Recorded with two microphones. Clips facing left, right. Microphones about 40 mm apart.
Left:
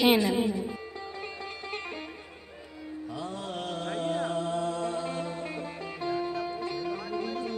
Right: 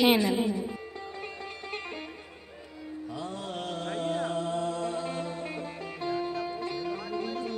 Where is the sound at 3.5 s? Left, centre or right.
Centre.